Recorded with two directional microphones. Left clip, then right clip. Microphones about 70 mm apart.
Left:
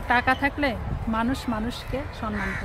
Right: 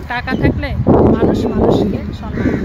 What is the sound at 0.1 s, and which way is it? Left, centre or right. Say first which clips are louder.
Speech: right 4 dB; left.